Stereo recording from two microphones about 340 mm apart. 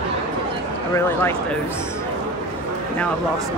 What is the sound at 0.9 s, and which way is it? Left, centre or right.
Speech, centre.